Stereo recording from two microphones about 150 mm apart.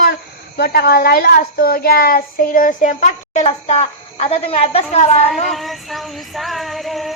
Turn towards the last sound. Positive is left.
turn(degrees=0)  # may be behind; listen again after turning